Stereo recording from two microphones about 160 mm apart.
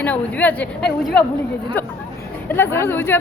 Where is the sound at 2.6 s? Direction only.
15° left (ahead or behind).